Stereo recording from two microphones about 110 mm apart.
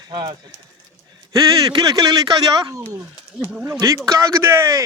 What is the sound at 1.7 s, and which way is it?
Speech, 40° right (ahead or behind).